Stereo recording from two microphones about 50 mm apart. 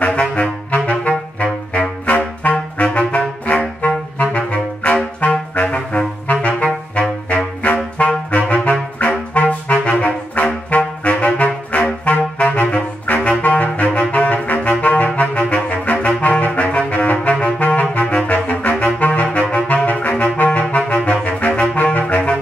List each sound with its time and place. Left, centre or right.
0.0 s saxophone: left
8.3 s music: left
9.0 s saxophone: left